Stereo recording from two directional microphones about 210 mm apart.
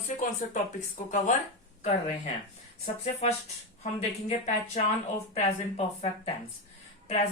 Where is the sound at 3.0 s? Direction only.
30° left (ahead or behind).